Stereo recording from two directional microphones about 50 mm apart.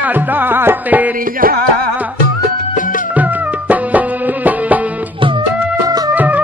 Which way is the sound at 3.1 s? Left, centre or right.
Right.